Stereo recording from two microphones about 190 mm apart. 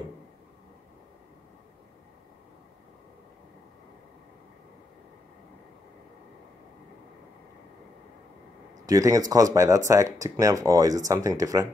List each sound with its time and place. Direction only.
8.8 s speech: 15° right (ahead or behind)